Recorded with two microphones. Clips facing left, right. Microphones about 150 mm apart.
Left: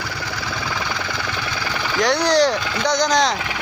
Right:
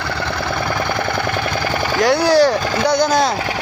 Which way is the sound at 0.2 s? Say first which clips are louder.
Right 8 dB; 60° right (ahead or behind).